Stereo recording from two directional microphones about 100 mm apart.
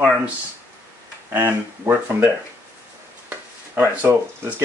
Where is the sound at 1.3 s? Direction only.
25° right (ahead or behind).